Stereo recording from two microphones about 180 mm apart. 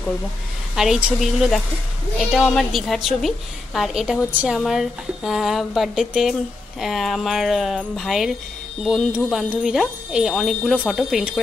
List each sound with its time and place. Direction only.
0.7 s a woman's voice: 5° right (ahead or behind)